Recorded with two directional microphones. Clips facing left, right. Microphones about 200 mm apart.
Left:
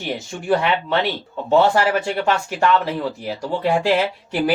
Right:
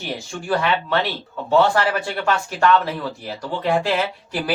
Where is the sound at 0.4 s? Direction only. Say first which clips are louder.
Left 2 dB; 20° left (ahead or behind).